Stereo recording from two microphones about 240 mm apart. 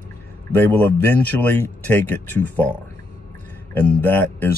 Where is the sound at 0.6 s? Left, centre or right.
Centre.